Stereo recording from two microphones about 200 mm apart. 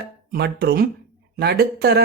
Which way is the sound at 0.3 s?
55° right (ahead or behind).